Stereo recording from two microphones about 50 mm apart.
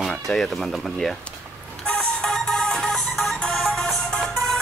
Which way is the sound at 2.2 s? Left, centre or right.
Centre.